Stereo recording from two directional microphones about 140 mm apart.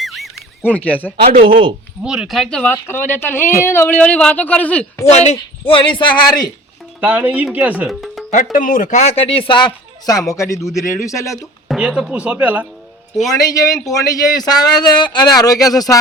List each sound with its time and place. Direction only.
0.0 s a sound: centre (ahead or behind)
0.6 s speech: 10° left (ahead or behind)
1.3 s speech: 90° right
2.0 s speech: 5° right (ahead or behind)
2.7 s speech: 15° left (ahead or behind)
5.1 s speech: 50° left (ahead or behind); by 6.5 s 30° left (ahead or behind)
7.0 s speech: 10° right (ahead or behind)
7.9 s music: centre (ahead or behind)
8.5 s speech: 75° left (ahead or behind); by 11.4 s 20° left (ahead or behind)
11.7 s speech: 5° right (ahead or behind)
13.3 s speech: 25° left (ahead or behind)